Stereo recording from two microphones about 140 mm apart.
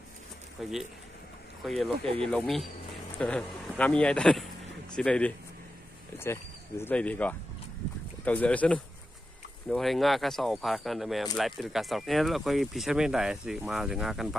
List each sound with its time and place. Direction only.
0.6 s speech: centre (ahead or behind)
6.1 s speech: 15° left (ahead or behind); by 14.3 s 5° right (ahead or behind)